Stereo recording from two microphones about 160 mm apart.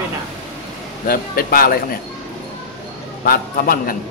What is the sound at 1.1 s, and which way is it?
Speech, 65° left (ahead or behind).